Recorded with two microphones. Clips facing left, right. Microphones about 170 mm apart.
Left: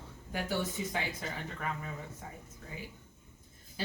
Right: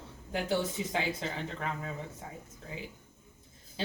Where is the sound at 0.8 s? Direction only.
20° right (ahead or behind).